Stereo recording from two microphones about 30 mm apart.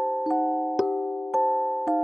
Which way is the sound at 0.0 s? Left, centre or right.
Centre.